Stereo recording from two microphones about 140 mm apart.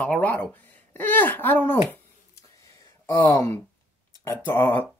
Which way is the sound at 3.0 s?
15° left (ahead or behind).